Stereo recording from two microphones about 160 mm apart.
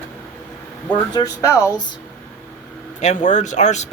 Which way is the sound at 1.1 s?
20° left (ahead or behind).